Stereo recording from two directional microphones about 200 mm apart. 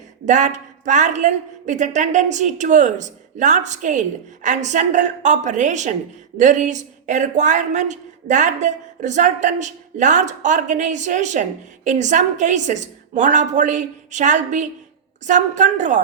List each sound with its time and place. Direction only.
0.3 s a woman's voice: 35° right (ahead or behind)